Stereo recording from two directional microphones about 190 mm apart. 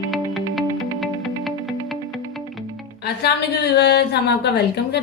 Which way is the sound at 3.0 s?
60° left (ahead or behind).